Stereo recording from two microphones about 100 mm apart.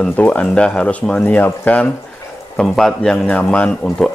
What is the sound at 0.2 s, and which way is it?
A man's voice, 10° left (ahead or behind).